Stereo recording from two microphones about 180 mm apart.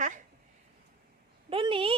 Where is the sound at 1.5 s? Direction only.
30° right (ahead or behind).